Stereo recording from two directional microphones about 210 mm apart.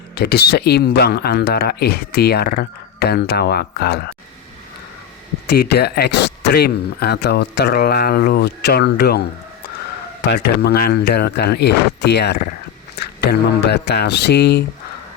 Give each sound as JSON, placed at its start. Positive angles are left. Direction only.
{"t": 0.1, "sound": "speech", "side_deg": 50}
{"t": 5.5, "sound": "speech", "side_deg": 50}
{"t": 10.2, "sound": "speech", "side_deg": 50}
{"t": 13.7, "sound": "speech", "side_deg": 50}